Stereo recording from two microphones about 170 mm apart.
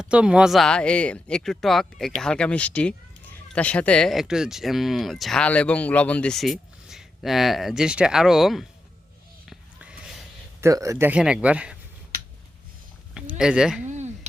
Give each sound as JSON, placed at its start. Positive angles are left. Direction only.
{"t": 0.0, "sound": "speech", "side_deg": -5}
{"t": 10.6, "sound": "speech", "side_deg": -20}
{"t": 13.1, "sound": "speech", "side_deg": -5}
{"t": 13.8, "sound": "a sound", "side_deg": -45}